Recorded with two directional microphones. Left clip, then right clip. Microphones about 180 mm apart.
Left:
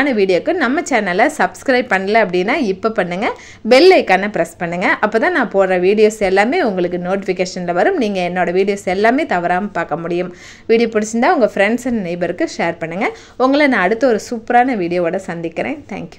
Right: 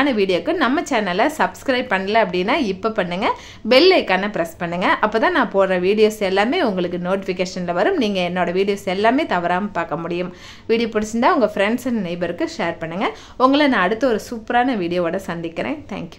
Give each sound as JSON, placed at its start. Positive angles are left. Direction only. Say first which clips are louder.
{"t": 0.0, "sound": "a woman's voice", "louder": "left 4 dB", "side_deg": 15}